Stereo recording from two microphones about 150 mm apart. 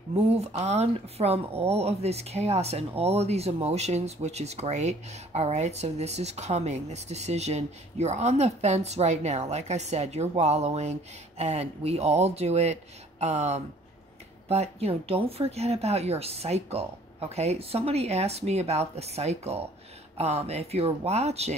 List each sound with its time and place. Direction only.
0.1 s speech: 45° right (ahead or behind)